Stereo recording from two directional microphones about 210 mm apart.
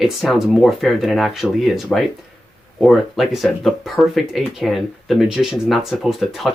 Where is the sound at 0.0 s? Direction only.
Centre (ahead or behind).